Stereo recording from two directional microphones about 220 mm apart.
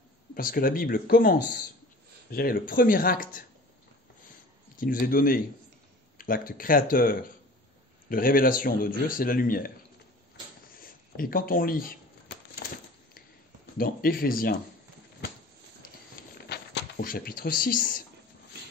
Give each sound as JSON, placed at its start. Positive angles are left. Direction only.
{"t": 0.3, "sound": "speech", "side_deg": 40}
{"t": 4.7, "sound": "speech", "side_deg": 40}
{"t": 10.8, "sound": "speech", "side_deg": 40}
{"t": 12.6, "sound": "a sound", "side_deg": 40}
{"t": 13.7, "sound": "speech", "side_deg": 40}
{"t": 16.3, "sound": "speech", "side_deg": 50}